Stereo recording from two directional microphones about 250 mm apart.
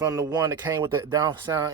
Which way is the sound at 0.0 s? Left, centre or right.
Centre.